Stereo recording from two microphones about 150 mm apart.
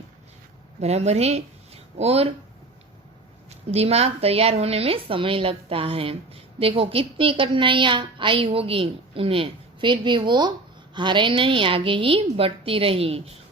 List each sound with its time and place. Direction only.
0.8 s speech: 45° right (ahead or behind)
3.5 s a woman's voice: 45° right (ahead or behind)